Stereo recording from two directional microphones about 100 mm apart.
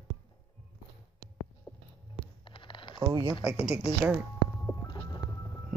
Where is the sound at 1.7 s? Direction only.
25° left (ahead or behind).